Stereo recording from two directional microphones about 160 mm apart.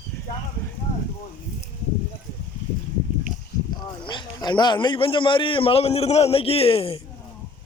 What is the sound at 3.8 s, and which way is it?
A man's voice, 30° left (ahead or behind).